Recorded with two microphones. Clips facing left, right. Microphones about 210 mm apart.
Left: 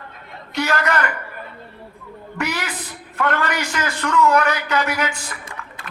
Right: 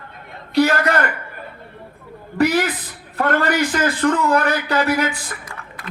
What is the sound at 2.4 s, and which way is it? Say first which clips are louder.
Speech: right 9 dB; 35° right (ahead or behind).